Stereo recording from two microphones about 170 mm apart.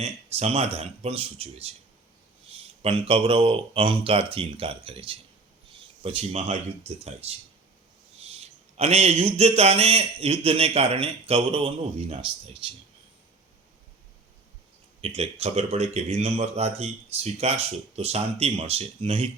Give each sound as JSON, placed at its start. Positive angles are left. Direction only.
{"t": 0.0, "sound": "speech", "side_deg": -40}
{"t": 15.0, "sound": "speech", "side_deg": -35}